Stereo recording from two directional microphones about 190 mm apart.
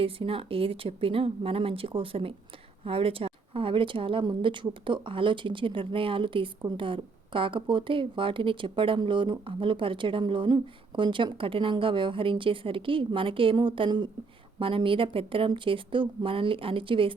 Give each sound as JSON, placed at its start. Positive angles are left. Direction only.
{"t": 0.0, "sound": "speech", "side_deg": -30}